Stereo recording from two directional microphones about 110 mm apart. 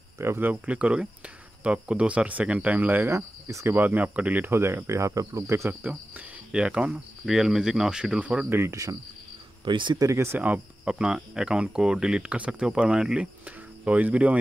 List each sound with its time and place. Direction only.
0.2 s speech: 20° right (ahead or behind)
3.7 s speech: 15° right (ahead or behind)
8.5 s speech: 25° right (ahead or behind)
9.7 s speech: 45° right (ahead or behind)
9.9 s speech: 30° right (ahead or behind); by 14.4 s 15° right (ahead or behind)